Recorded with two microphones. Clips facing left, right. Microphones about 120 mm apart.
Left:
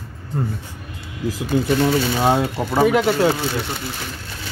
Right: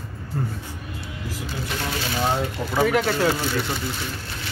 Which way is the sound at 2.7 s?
20° left (ahead or behind).